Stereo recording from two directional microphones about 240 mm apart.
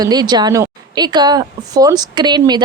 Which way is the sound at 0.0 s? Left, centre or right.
Centre.